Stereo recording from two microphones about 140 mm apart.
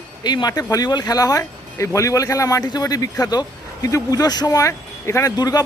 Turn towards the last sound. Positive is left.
turn(degrees=25)  # may be behind; listen again after turning